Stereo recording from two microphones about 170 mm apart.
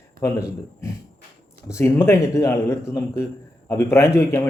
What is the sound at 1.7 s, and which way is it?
Speech, 15° left (ahead or behind).